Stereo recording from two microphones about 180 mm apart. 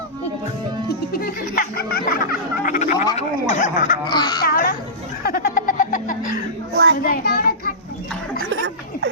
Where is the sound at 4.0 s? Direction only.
25° left (ahead or behind).